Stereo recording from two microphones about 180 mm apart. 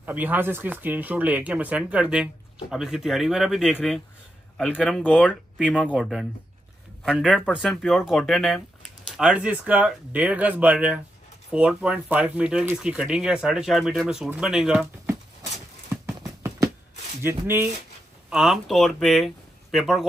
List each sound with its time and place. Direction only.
0.0 s speech: 10° right (ahead or behind)
16.4 s a sound: 15° right (ahead or behind)
17.2 s speech: 10° right (ahead or behind)
18.3 s speech: centre (ahead or behind)